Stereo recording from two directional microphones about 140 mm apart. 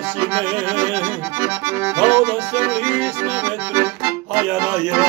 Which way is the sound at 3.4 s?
10° right (ahead or behind).